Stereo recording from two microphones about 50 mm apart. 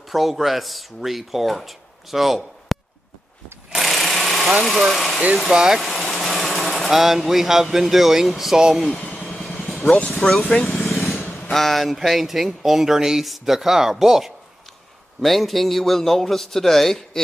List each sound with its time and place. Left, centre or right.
0.1 s speech: centre
3.7 s sewing machine: centre
4.6 s speech: centre
4.9 s speech: centre
5.3 s speech: centre
5.8 s speech: centre
8.9 s vehicle: left
10.1 s speech: centre
10.6 s vehicle: centre
11.5 s speech: centre